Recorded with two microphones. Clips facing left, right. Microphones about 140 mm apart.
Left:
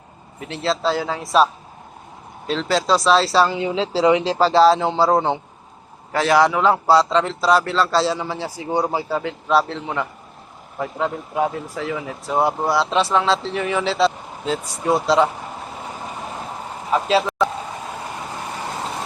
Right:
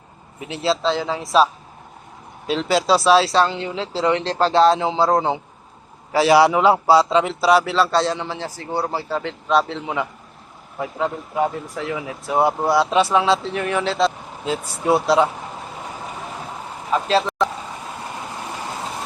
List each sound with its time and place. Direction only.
0.3 s speech: 5° right (ahead or behind)
2.5 s speech: 5° right (ahead or behind)
3.7 s speech: 15° left (ahead or behind); by 5.4 s centre (ahead or behind)
6.1 s a man's voice: 10° right (ahead or behind)
16.9 s speech: 5° left (ahead or behind)